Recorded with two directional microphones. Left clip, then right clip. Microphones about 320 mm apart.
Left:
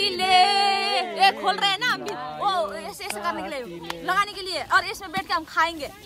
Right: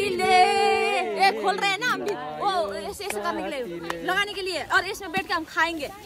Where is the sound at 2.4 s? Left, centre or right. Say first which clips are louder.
Left 1 dB; left.